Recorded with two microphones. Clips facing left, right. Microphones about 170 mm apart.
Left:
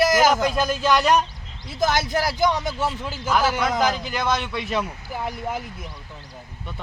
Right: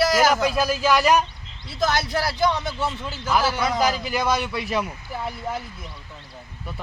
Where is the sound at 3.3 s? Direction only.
5° right (ahead or behind).